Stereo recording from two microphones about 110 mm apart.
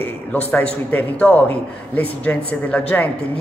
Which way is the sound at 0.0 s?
15° left (ahead or behind).